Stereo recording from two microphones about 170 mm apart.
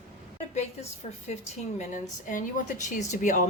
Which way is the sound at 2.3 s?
50° left (ahead or behind).